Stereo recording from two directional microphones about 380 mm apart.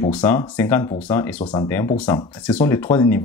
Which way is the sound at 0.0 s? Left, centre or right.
Centre.